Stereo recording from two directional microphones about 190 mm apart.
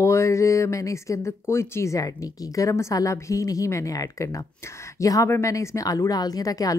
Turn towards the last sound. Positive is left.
turn(degrees=20)  # may be behind; listen again after turning